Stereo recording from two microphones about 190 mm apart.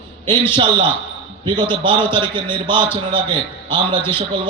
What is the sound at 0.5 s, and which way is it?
A man's voice, 25° right (ahead or behind).